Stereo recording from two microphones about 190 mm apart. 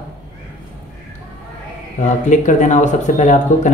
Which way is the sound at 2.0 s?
40° left (ahead or behind).